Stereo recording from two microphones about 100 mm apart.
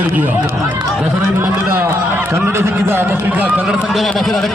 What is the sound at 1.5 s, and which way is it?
A man's voice, 20° right (ahead or behind).